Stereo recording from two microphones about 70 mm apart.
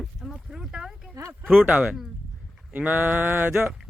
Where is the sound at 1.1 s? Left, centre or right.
Right.